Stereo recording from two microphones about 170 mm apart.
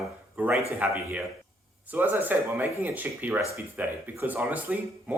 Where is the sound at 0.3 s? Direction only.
10° right (ahead or behind).